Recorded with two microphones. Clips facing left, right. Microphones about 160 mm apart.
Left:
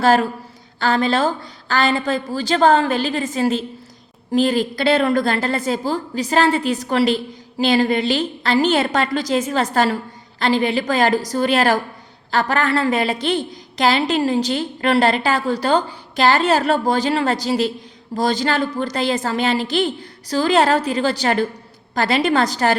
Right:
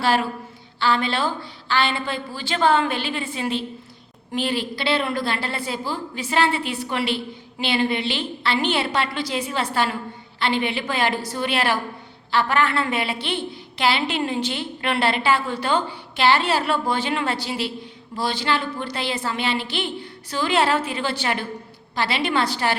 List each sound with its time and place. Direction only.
0.0 s a woman's voice: 45° left (ahead or behind)